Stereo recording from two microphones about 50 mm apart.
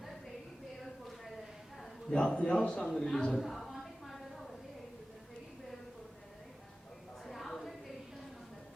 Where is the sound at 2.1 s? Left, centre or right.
Centre.